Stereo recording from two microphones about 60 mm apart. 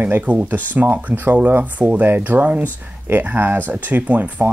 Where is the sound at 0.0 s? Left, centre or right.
Right.